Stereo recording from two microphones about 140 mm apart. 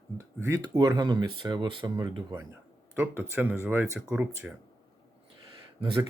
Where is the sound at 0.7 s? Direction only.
30° right (ahead or behind).